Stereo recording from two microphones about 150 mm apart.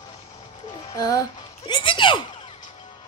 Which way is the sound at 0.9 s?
20° left (ahead or behind).